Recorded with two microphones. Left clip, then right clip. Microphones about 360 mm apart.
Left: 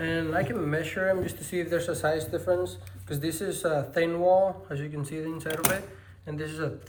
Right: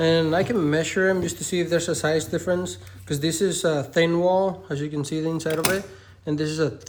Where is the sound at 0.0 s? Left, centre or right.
Centre.